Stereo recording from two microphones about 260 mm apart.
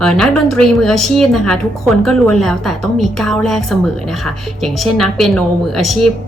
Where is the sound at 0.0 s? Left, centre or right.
Centre.